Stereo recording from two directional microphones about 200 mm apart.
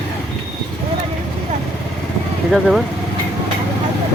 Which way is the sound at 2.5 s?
Centre (ahead or behind).